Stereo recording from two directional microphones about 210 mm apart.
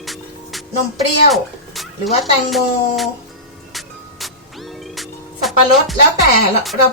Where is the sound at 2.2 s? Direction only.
Centre (ahead or behind).